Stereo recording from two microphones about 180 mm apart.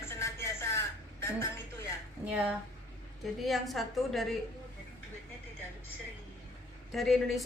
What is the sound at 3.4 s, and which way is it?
Speech, centre (ahead or behind).